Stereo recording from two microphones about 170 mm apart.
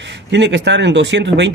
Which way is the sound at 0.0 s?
90° right.